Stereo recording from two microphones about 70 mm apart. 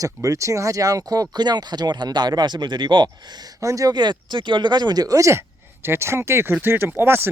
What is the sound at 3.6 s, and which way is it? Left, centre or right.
Speech, right.